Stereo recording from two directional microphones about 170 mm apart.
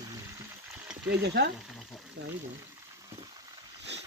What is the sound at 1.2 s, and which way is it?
Speech, 80° right.